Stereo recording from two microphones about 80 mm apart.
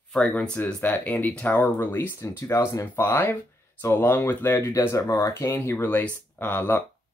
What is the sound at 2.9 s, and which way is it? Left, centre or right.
Speech, left.